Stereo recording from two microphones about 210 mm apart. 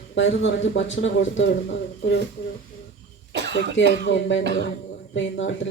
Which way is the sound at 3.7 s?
55° left (ahead or behind).